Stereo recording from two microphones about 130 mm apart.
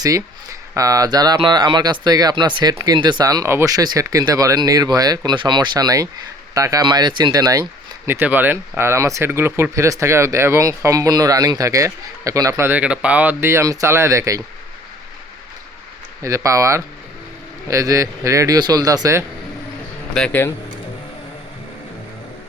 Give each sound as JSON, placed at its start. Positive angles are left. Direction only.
{"t": 0.7, "sound": "speech", "side_deg": -25}
{"t": 16.2, "sound": "speech", "side_deg": -25}
{"t": 20.1, "sound": "speech", "side_deg": 10}